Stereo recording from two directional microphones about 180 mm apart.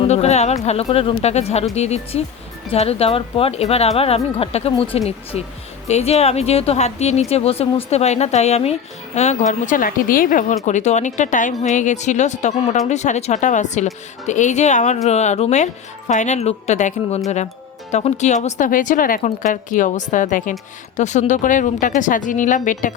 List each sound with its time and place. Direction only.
0.0 s a woman's voice: 35° left (ahead or behind)